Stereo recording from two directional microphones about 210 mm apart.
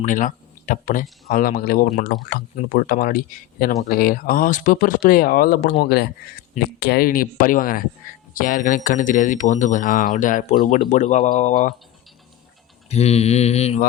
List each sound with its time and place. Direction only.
0.0 s speech: 40° left (ahead or behind)
12.9 s speech: 30° left (ahead or behind)